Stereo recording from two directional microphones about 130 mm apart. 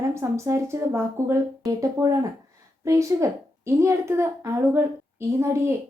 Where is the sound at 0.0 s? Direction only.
20° right (ahead or behind).